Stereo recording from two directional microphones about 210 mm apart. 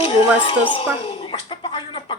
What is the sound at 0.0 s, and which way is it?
Speech, 25° left (ahead or behind).